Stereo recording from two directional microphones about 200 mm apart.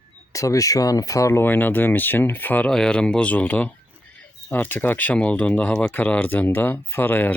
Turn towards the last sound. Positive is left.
turn(degrees=10)  # may be behind; listen again after turning